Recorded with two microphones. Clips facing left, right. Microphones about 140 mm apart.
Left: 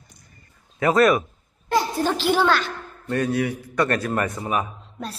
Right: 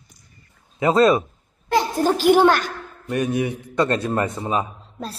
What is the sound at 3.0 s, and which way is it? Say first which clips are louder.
A man's voice: right 1 dB; 15° right (ahead or behind).